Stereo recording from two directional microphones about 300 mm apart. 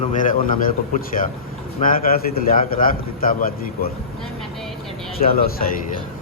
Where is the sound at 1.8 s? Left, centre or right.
Left.